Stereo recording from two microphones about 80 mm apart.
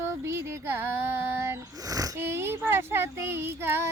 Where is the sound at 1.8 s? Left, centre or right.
Right.